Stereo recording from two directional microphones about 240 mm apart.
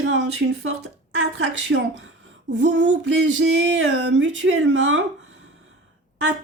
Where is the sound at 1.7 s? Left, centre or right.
Right.